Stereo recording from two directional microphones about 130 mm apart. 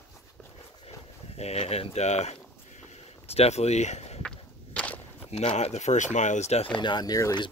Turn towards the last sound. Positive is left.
turn(degrees=30)  # may be behind; listen again after turning